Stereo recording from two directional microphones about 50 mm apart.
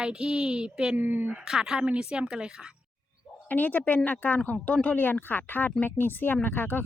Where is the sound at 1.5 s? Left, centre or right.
Centre.